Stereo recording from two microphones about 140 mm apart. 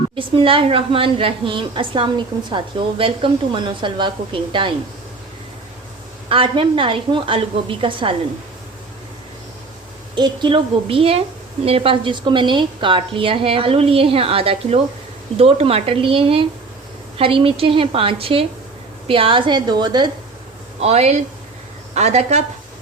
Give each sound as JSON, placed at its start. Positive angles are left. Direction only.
{"t": 0.2, "sound": "a woman's voice", "side_deg": -40}
{"t": 6.2, "sound": "a woman's voice", "side_deg": -40}
{"t": 10.2, "sound": "a woman's voice", "side_deg": -35}
{"t": 20.8, "sound": "speech", "side_deg": -50}